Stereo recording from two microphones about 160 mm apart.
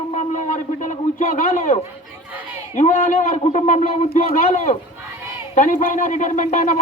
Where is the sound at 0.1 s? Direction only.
50° left (ahead or behind).